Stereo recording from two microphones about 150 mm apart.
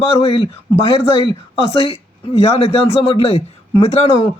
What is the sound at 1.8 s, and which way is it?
Speech, 40° left (ahead or behind).